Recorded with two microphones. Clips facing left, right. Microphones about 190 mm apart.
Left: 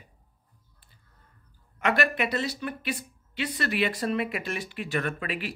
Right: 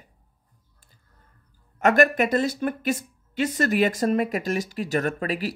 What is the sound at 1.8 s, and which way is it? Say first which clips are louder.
Speech: right 7 dB; 45° right (ahead or behind).